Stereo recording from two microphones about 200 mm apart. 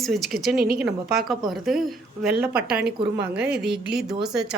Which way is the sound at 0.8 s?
Centre (ahead or behind).